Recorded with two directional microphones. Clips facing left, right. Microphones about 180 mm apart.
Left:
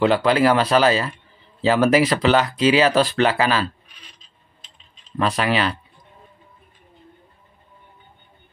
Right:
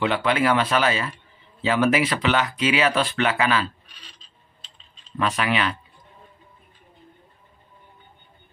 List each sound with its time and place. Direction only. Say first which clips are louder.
0.0 s speech: left 5 dB; 35° left (ahead or behind)
5.2 s speech: left 3 dB; 35° left (ahead or behind)